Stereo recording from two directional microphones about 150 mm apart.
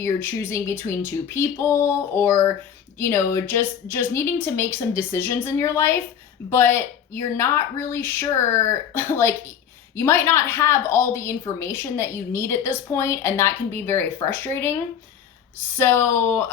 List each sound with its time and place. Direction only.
0.0 s a woman's voice: 15° left (ahead or behind)
15.8 s a woman's voice: 15° left (ahead or behind)